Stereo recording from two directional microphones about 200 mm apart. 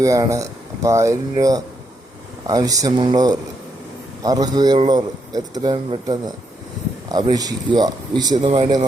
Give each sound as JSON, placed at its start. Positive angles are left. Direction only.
{"t": 0.0, "sound": "a man's voice", "side_deg": -15}